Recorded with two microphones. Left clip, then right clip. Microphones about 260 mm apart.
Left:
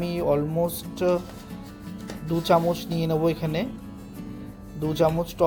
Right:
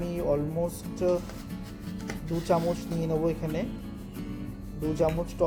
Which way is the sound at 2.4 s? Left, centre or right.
Left.